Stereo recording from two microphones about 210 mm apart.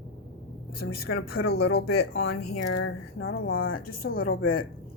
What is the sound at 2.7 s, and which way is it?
Speech, 70° left (ahead or behind).